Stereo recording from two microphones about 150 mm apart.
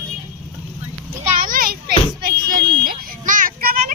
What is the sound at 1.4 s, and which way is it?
Children playing, 70° right (ahead or behind).